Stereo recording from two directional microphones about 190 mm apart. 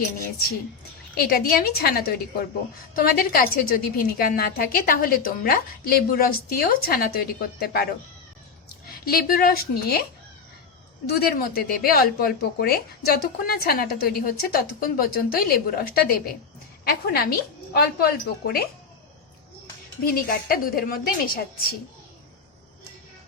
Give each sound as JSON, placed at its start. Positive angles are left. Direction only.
{"t": 1.1, "sound": "speech", "side_deg": 50}
{"t": 9.0, "sound": "speech", "side_deg": 50}
{"t": 11.2, "sound": "speech", "side_deg": 50}
{"t": 20.1, "sound": "speech", "side_deg": 50}